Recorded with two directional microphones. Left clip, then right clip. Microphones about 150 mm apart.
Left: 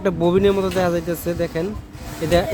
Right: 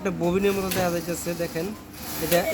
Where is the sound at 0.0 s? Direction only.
90° left.